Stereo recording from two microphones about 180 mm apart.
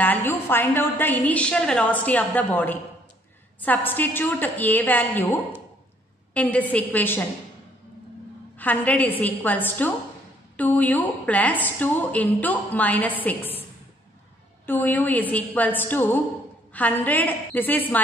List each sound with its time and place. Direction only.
0.0 s a woman's voice: 10° left (ahead or behind)
8.5 s a woman's voice: 10° left (ahead or behind)
14.7 s a woman's voice: 10° left (ahead or behind)